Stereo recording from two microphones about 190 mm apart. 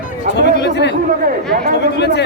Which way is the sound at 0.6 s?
65° left (ahead or behind).